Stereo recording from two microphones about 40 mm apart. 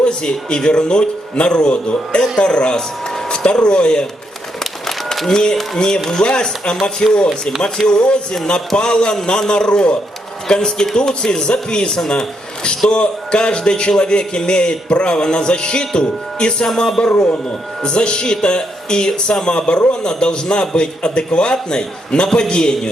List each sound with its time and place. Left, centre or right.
0.0 s a man's voice: left
4.6 s a sound: centre
5.3 s a man's voice: centre